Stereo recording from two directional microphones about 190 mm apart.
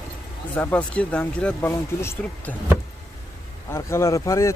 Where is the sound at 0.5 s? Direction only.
10° left (ahead or behind).